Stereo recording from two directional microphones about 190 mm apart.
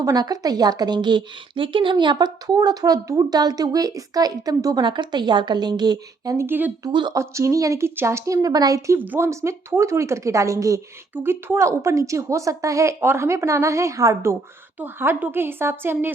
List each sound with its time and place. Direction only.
0.0 s a woman's voice: 20° right (ahead or behind)